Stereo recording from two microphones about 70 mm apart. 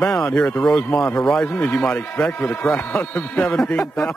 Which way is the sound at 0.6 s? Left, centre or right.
Centre.